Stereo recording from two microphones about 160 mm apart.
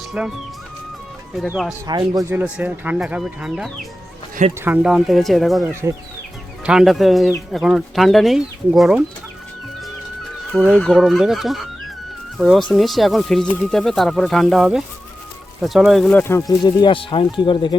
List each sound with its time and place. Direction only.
0.1 s speech: 5° right (ahead or behind)
1.4 s speech: 5° right (ahead or behind)
1.9 s speech: 25° right (ahead or behind)
2.3 s speech: 10° right (ahead or behind)
6.7 s speech: centre (ahead or behind)
10.5 s speech: centre (ahead or behind)
16.2 s speech: 20° left (ahead or behind)